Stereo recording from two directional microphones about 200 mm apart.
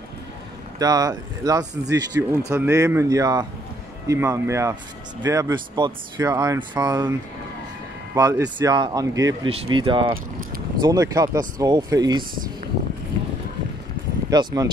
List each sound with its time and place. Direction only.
0.7 s speech: 20° right (ahead or behind)
8.1 s speech: 20° right (ahead or behind)
14.3 s speech: 20° right (ahead or behind)